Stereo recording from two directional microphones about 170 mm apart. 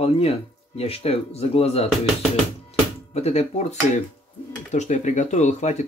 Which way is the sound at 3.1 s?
40° left (ahead or behind).